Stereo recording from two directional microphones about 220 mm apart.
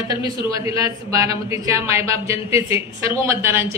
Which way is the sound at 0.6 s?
15° right (ahead or behind).